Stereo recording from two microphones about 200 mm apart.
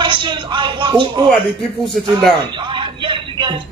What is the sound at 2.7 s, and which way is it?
Speech, 25° right (ahead or behind).